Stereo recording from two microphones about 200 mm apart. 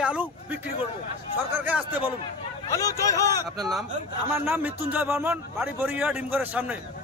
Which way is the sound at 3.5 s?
Centre (ahead or behind).